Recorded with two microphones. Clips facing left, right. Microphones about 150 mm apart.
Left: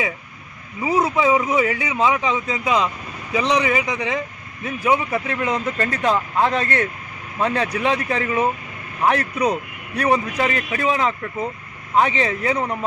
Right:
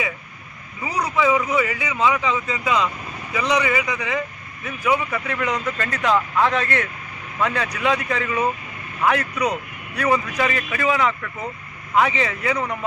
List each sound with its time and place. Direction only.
0.8 s a man's voice: 25° left (ahead or behind)